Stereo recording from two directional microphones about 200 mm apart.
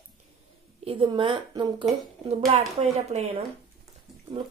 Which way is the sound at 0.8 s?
25° right (ahead or behind).